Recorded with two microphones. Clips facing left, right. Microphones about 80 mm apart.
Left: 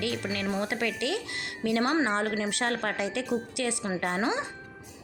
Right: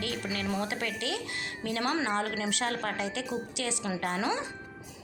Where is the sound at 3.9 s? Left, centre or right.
Left.